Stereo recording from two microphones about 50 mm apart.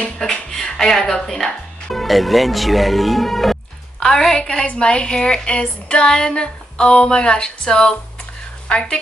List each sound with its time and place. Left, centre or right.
0.2 s a woman's voice: centre